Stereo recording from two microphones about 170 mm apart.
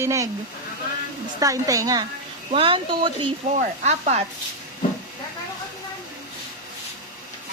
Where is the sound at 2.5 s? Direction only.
30° right (ahead or behind).